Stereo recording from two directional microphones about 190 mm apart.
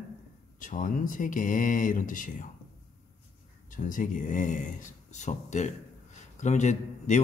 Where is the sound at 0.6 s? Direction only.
45° left (ahead or behind).